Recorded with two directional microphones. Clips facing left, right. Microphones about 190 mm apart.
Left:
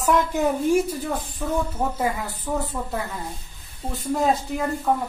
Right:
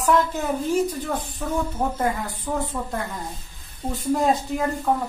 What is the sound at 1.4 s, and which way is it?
Speech, 5° left (ahead or behind).